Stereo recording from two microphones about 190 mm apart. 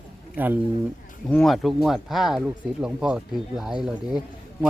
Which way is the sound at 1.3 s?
5° left (ahead or behind).